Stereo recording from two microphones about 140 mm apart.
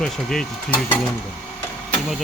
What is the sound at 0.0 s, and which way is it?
Speech, 5° left (ahead or behind).